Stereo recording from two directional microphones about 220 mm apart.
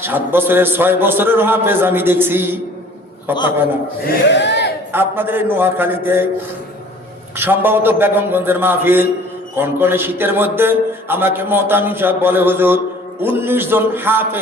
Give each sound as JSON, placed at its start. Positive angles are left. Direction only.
{"t": 0.0, "sound": "a man's voice", "side_deg": -10}
{"t": 4.0, "sound": "speech", "side_deg": 50}
{"t": 4.9, "sound": "a man's voice", "side_deg": -10}
{"t": 7.3, "sound": "a man's voice", "side_deg": -10}